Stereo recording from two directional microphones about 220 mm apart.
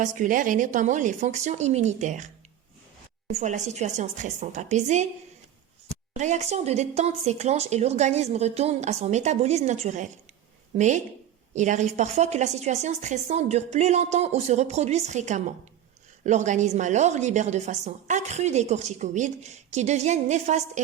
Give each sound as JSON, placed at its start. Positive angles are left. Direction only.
{"t": 0.0, "sound": "a woman's voice", "side_deg": -35}
{"t": 6.1, "sound": "a woman's voice", "side_deg": -30}